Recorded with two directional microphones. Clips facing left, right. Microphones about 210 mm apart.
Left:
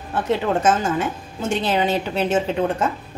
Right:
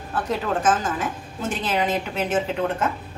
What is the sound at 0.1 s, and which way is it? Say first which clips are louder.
A woman's voice: left 4 dB; 25° left (ahead or behind).